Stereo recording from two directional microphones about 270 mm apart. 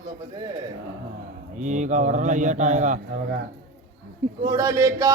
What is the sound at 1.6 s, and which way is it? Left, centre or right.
Speech, right.